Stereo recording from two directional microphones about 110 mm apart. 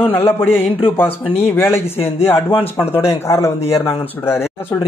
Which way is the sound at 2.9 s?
25° left (ahead or behind).